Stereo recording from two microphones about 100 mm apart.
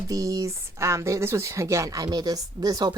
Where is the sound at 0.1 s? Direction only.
35° right (ahead or behind).